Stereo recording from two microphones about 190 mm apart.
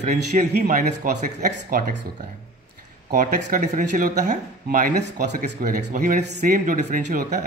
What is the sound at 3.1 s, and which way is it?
Speech, 45° right (ahead or behind).